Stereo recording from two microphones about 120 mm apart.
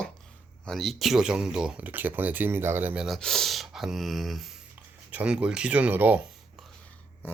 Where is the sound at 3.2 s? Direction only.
5° left (ahead or behind); by 6.2 s 15° right (ahead or behind).